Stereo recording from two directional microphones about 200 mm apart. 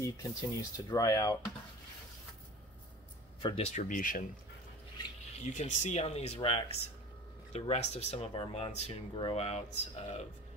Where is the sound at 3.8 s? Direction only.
40° left (ahead or behind).